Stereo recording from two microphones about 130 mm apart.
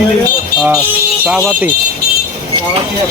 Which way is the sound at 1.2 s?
10° right (ahead or behind).